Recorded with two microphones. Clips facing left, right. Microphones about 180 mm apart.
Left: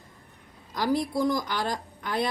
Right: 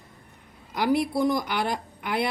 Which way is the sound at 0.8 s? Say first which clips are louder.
Right 2 dB; 65° right (ahead or behind).